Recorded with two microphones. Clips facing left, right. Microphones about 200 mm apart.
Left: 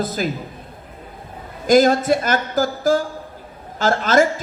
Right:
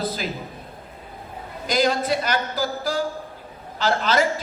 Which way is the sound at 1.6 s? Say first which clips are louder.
Left 8 dB; 50° left (ahead or behind).